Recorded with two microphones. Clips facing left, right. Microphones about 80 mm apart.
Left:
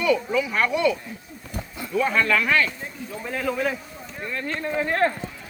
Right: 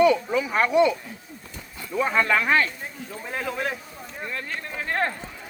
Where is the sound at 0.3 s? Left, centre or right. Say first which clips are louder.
Right 3 dB; right.